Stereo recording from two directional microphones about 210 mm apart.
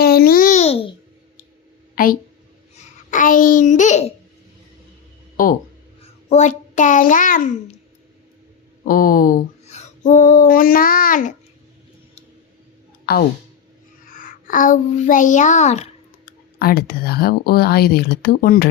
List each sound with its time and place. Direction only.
0.0 s babbling: 45° left (ahead or behind); by 0.9 s 30° left (ahead or behind)
2.0 s a child's voice: 45° left (ahead or behind)
5.4 s a child's voice: 40° left (ahead or behind)
8.8 s speech: 40° left (ahead or behind)
13.1 s a child's voice: 50° left (ahead or behind); by 16.3 s 30° left (ahead or behind)
16.6 s speech: 45° left (ahead or behind)